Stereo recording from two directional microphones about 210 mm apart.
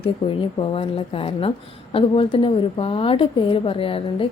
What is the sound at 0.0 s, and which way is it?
Speech, 25° left (ahead or behind).